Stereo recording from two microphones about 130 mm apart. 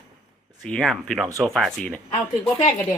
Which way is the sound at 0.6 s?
5° left (ahead or behind).